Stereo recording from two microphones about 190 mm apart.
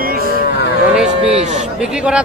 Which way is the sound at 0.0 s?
50° right (ahead or behind).